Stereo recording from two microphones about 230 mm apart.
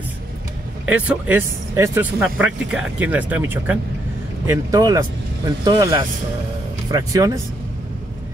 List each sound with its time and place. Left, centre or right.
0.8 s speech: centre